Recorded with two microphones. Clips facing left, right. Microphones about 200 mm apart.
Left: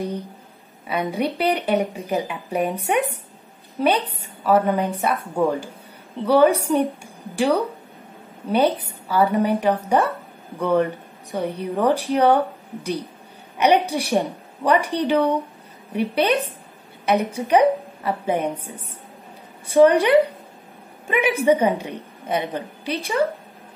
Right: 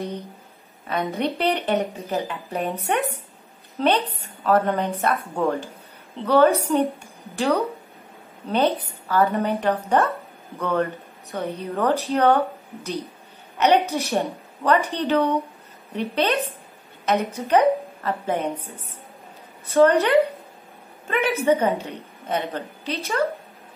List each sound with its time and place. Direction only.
0.8 s speech: 10° left (ahead or behind)
3.7 s speech: 10° left (ahead or behind)
13.6 s a woman's voice: 10° left (ahead or behind)
19.6 s speech: 15° left (ahead or behind)